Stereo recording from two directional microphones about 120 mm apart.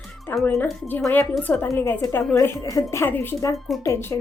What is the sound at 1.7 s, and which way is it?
A woman's voice, 20° left (ahead or behind).